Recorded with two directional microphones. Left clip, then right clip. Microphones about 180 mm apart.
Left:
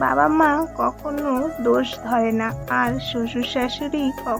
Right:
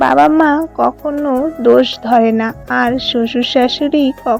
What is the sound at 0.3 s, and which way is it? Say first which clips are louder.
Speech: right 6 dB; 25° right (ahead or behind).